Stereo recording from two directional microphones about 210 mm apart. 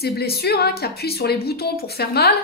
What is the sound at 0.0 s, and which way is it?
A woman's voice, 50° left (ahead or behind).